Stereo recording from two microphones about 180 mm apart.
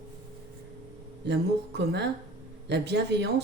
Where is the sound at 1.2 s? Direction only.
70° right (ahead or behind).